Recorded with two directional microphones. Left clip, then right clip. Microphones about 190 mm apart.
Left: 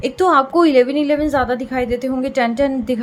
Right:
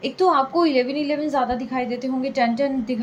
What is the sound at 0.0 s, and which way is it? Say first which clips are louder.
A woman's voice: left 4 dB; 50° left (ahead or behind).